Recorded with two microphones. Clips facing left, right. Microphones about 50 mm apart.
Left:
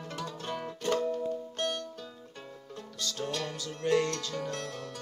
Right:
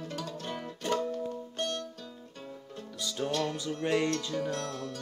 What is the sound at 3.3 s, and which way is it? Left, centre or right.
Music, centre.